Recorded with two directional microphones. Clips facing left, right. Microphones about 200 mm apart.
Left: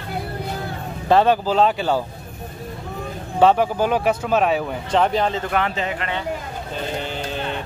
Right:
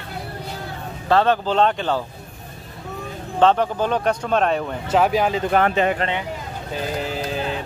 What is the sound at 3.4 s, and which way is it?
Speech, 10° left (ahead or behind).